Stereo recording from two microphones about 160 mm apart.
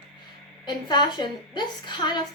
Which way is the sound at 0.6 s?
25° left (ahead or behind).